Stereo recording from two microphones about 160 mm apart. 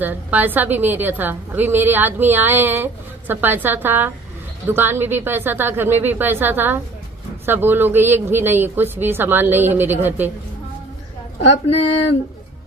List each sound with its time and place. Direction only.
0.0 s speech: 10° right (ahead or behind)
11.4 s speech: 45° left (ahead or behind)